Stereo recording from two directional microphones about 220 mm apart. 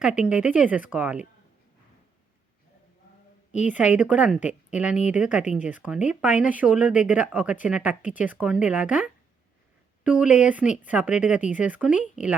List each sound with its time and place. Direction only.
0.0 s a woman's voice: 5° right (ahead or behind)
3.5 s a woman's voice: 30° left (ahead or behind)
3.9 s a woman's voice: 5° right (ahead or behind)